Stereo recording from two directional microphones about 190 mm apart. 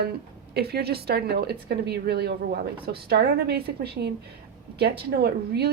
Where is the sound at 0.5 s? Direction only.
55° right (ahead or behind).